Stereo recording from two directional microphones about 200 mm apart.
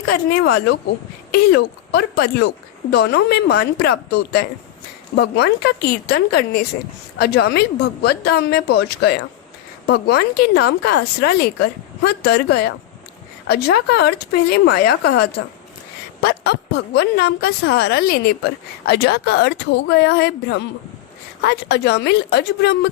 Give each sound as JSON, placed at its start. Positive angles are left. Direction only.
{"t": 0.3, "sound": "a woman's voice", "side_deg": 50}